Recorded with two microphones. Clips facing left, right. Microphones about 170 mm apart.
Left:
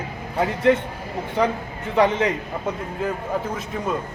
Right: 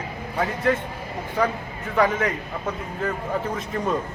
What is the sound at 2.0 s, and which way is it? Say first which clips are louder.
Speech: left 3 dB; 25° left (ahead or behind).